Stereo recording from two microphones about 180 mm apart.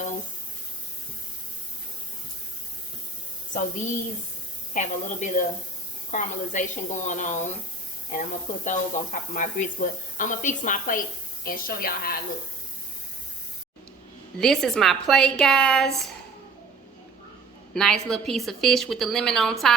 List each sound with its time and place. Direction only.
4.7 s speech: 45° left (ahead or behind)
14.3 s a woman's voice: 5° left (ahead or behind)
17.7 s a woman's voice: centre (ahead or behind)